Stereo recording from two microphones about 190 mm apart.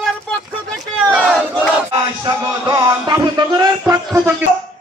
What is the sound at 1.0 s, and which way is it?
Battle cry, 5° right (ahead or behind).